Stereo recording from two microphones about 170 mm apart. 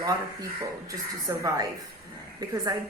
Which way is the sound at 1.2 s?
20° right (ahead or behind).